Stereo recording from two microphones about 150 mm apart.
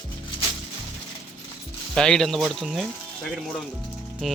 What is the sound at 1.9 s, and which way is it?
Speech, 5° left (ahead or behind).